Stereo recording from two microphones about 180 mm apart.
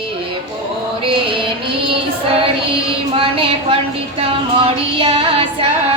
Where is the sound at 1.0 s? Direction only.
30° right (ahead or behind).